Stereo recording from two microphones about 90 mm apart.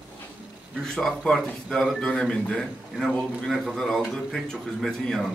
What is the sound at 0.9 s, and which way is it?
A man's voice, 5° left (ahead or behind).